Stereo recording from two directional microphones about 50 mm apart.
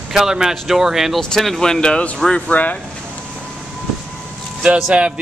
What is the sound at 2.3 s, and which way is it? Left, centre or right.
Speech, left.